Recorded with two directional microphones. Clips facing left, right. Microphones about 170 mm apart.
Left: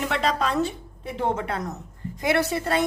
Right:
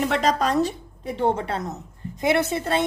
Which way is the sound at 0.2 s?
40° right (ahead or behind).